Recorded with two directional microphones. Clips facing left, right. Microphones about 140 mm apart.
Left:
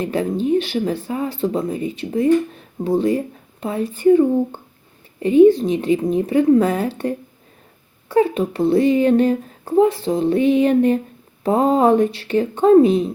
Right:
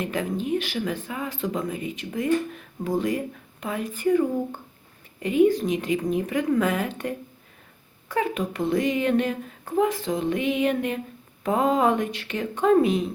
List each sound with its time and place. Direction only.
0.0 s speech: 30° left (ahead or behind)